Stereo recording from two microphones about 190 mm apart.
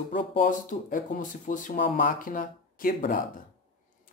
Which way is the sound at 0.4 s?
45° left (ahead or behind).